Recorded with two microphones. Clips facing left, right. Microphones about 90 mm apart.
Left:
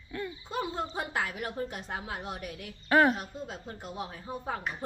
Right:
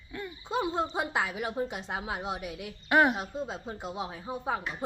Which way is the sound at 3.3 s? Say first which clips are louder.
Right 4 dB; 25° right (ahead or behind).